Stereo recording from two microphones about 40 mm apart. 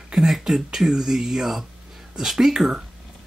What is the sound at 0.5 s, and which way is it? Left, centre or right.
Speech, centre.